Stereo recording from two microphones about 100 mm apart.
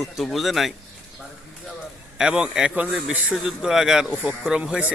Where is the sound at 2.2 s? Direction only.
10° right (ahead or behind).